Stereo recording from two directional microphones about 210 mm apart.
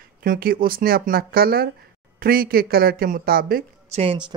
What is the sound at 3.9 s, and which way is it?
Speech, 30° right (ahead or behind).